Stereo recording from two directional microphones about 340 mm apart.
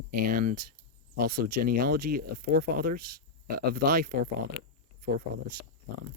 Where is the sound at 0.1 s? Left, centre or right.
Right.